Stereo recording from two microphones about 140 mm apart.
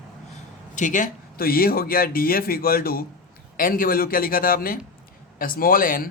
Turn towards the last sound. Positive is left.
turn(degrees=85)